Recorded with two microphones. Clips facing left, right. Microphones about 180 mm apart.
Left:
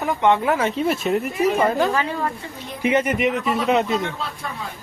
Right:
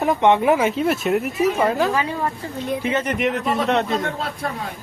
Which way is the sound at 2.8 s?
15° left (ahead or behind).